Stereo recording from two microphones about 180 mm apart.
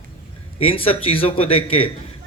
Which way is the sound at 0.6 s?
30° left (ahead or behind).